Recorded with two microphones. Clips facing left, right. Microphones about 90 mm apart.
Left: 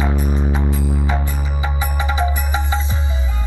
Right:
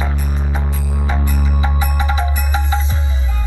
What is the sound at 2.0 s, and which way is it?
Music, 25° left (ahead or behind).